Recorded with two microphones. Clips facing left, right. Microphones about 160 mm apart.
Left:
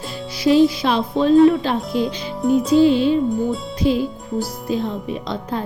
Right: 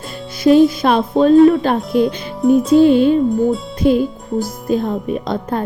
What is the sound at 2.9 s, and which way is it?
Speech, 50° right (ahead or behind).